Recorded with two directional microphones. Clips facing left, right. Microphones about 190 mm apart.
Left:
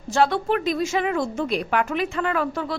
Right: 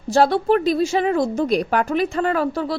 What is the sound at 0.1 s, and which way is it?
A woman's voice, 35° right (ahead or behind).